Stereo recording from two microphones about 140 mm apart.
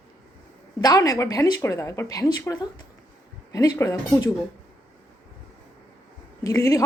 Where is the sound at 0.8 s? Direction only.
25° left (ahead or behind).